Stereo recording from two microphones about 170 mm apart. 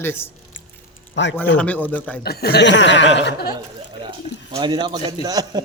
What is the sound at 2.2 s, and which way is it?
Speech, 65° left (ahead or behind).